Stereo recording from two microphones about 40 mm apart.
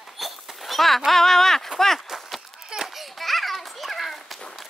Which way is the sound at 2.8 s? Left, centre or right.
Centre.